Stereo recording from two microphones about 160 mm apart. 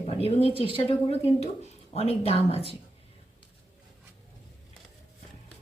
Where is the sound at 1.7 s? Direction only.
40° left (ahead or behind).